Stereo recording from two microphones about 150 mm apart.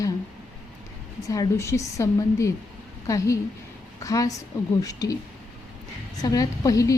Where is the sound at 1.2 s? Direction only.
25° left (ahead or behind).